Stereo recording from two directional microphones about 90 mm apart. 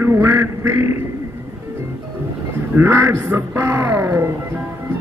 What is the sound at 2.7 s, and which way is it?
Speech, 25° right (ahead or behind).